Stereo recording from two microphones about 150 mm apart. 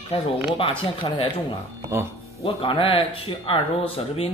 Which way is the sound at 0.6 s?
35° left (ahead or behind).